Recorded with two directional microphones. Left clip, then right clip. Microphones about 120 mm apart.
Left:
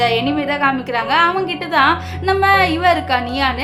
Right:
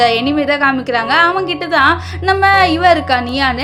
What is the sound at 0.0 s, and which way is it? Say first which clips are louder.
A woman's voice: right 4 dB; 40° right (ahead or behind).